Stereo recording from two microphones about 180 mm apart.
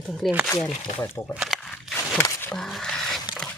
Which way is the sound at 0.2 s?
5° right (ahead or behind).